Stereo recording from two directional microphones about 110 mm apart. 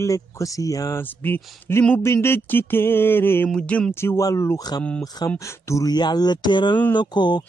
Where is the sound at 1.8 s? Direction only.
20° left (ahead or behind).